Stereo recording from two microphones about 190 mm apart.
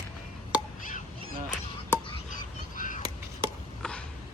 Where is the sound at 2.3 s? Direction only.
45° left (ahead or behind).